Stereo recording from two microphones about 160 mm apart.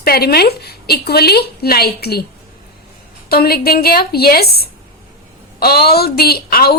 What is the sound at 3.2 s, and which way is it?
Speech, 75° left (ahead or behind).